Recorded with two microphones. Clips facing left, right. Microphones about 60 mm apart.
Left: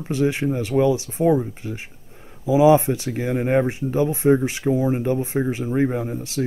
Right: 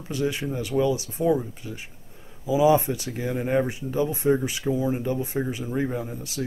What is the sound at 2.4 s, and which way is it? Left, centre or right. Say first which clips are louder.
Speech: left 5 dB; left.